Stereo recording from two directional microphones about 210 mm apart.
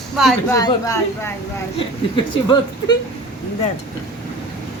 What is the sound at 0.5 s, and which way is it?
A woman's voice, 15° left (ahead or behind).